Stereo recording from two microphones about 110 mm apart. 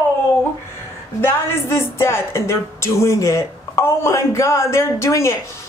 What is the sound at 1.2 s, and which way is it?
A woman's voice, 25° left (ahead or behind).